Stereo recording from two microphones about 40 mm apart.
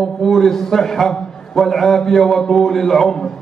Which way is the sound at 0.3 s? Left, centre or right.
Centre.